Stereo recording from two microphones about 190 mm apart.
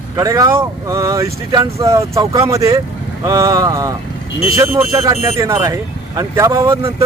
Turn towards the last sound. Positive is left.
turn(degrees=-15)  # may be behind; listen again after turning